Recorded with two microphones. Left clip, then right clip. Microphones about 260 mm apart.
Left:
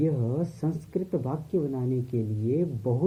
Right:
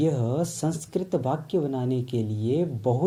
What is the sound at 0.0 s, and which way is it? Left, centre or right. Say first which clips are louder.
Speech: right 3 dB; right.